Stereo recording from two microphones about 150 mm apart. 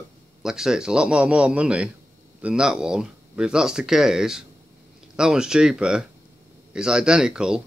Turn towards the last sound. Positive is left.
turn(degrees=-5)  # may be behind; listen again after turning